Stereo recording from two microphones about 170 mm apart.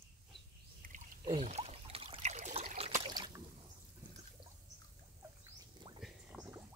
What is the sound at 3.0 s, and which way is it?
Boat, 25° right (ahead or behind).